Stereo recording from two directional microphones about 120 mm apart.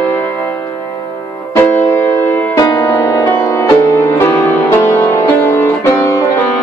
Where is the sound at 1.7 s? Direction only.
15° left (ahead or behind).